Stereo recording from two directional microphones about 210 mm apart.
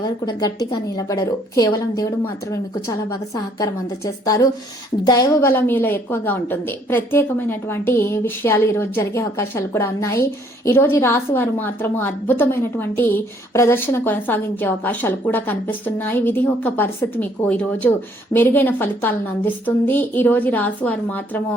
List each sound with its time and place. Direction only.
0.3 s a woman's voice: 20° left (ahead or behind)